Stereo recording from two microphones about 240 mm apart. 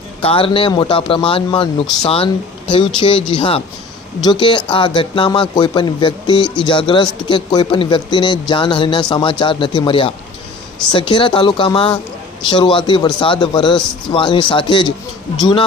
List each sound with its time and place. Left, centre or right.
0.2 s a man's voice: left